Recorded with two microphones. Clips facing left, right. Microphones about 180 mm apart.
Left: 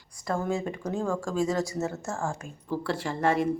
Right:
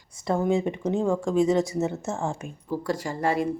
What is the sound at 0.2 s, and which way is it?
Speech, 20° right (ahead or behind).